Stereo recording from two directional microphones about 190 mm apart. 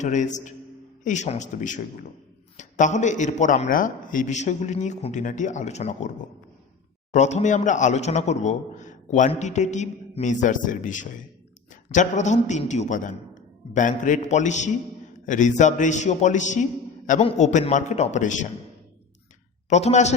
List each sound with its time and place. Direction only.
0.0 s speech: 40° left (ahead or behind)
7.1 s speech: 40° left (ahead or behind)
19.7 s speech: 35° left (ahead or behind)